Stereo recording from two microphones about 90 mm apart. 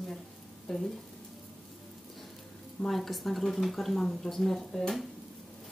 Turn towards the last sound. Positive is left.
turn(degrees=5)  # may be behind; listen again after turning